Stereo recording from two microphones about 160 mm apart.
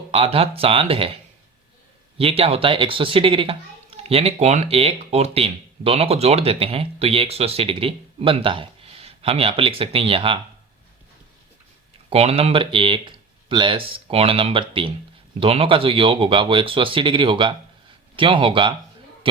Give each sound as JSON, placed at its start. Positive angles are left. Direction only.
{"t": 0.1, "sound": "speech", "side_deg": -35}
{"t": 2.1, "sound": "speech", "side_deg": -35}
{"t": 12.1, "sound": "speech", "side_deg": -40}
{"t": 19.2, "sound": "a sound", "side_deg": -35}